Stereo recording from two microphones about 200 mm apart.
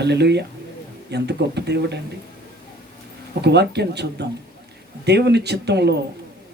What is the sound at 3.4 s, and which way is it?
Speech, 55° right (ahead or behind).